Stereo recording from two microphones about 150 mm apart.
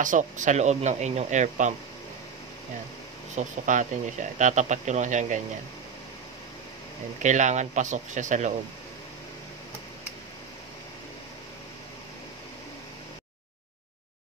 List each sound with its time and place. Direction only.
0.0 s speech: 55° right (ahead or behind)
3.3 s speech: 55° right (ahead or behind)
7.2 s speech: 50° right (ahead or behind)